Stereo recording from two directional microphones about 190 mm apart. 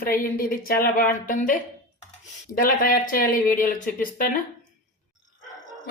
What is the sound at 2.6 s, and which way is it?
A woman's voice, 45° left (ahead or behind).